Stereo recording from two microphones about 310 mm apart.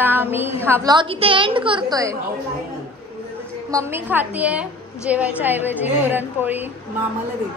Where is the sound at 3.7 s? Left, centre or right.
Centre.